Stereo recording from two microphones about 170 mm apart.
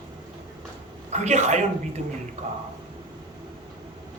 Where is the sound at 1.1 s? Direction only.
40° right (ahead or behind).